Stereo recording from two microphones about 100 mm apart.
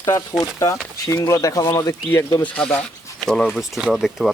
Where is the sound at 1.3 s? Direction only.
35° left (ahead or behind).